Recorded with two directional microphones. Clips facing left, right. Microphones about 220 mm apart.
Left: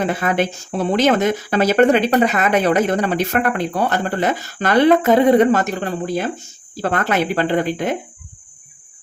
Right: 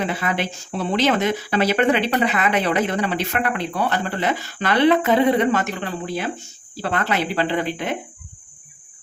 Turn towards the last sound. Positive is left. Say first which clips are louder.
# left 5 dB
turn(degrees=45)  # may be behind; listen again after turning